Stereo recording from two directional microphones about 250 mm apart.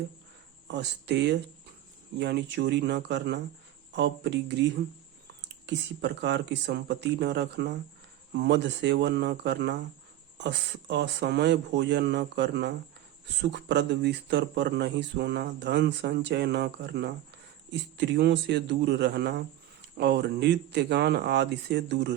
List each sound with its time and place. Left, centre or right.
0.7 s speech: right
5.6 s speech: right